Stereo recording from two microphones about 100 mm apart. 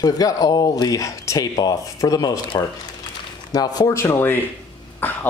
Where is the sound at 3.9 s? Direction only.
25° left (ahead or behind).